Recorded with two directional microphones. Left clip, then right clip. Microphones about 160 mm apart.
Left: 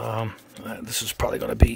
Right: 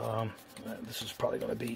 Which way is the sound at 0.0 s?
70° left (ahead or behind).